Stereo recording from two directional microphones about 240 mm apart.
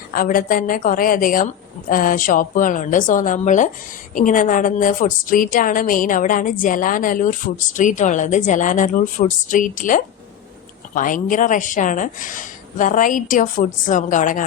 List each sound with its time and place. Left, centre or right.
0.1 s a woman's voice: left